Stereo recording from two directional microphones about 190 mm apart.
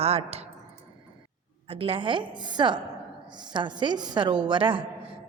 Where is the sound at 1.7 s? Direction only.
30° right (ahead or behind).